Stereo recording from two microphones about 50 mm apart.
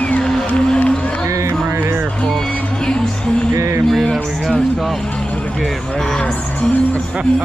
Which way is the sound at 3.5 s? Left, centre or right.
Right.